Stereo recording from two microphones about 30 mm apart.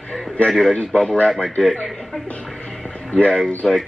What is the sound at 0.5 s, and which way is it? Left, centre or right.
Speech, left.